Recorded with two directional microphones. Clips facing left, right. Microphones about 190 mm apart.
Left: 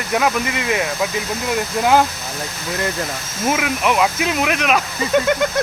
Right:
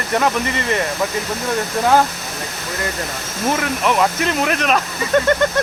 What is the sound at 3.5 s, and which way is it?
Speech, 5° left (ahead or behind).